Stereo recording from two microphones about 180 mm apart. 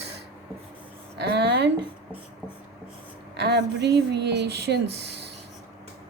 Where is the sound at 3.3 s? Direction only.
70° right (ahead or behind).